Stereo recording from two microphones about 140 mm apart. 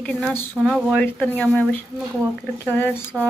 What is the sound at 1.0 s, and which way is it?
Speech, 10° left (ahead or behind).